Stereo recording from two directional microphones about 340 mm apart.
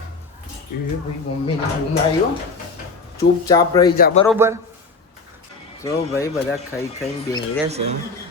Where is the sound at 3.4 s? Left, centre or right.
Centre.